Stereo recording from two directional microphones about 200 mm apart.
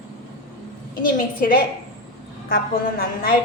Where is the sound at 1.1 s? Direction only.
40° left (ahead or behind).